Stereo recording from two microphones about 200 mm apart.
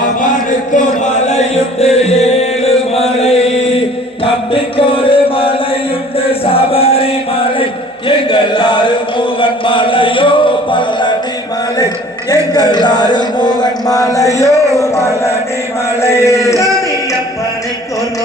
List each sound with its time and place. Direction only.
1.4 s chant: 30° left (ahead or behind)
6.1 s music: 30° left (ahead or behind)
7.6 s a sound: 25° left (ahead or behind)
12.3 s speech: 20° left (ahead or behind)
16.0 s chant: 15° left (ahead or behind)